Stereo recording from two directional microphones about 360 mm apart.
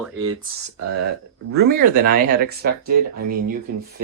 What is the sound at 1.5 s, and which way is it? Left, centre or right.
Speech, right.